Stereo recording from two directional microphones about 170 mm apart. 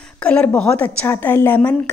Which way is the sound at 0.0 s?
5° left (ahead or behind).